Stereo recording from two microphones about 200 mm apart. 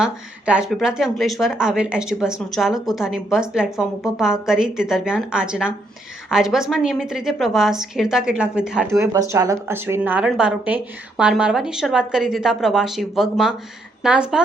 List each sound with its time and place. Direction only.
0.0 s a woman's voice: 5° right (ahead or behind)